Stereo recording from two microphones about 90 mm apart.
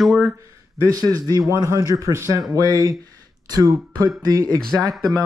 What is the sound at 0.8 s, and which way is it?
A man's voice, 40° right (ahead or behind).